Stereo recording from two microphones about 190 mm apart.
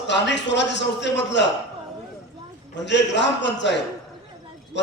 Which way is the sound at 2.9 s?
65° left (ahead or behind).